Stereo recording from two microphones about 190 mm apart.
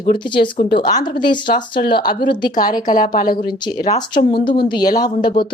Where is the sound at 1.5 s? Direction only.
55° left (ahead or behind).